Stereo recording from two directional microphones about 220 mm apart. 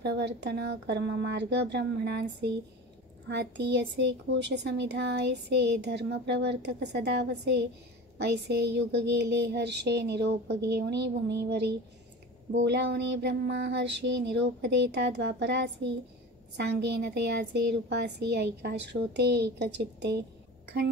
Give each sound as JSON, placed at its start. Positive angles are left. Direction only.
{"t": 0.0, "sound": "a woman's voice", "side_deg": -50}